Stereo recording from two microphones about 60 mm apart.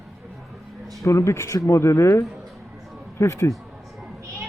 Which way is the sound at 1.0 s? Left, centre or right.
Left.